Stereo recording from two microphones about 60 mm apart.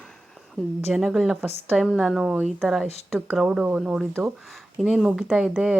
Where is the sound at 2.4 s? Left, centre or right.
Centre.